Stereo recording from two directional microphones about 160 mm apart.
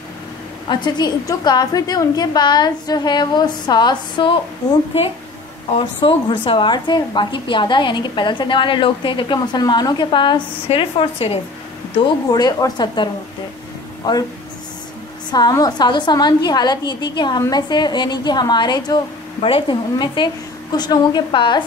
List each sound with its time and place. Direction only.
0.7 s a woman's voice: 30° left (ahead or behind)
5.8 s a woman's voice: 30° left (ahead or behind)
12.3 s a woman's voice: 25° left (ahead or behind)
15.3 s a woman's voice: 25° left (ahead or behind)